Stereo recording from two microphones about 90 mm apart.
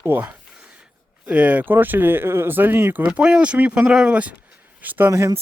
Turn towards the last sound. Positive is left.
turn(degrees=-40)  # may be behind; listen again after turning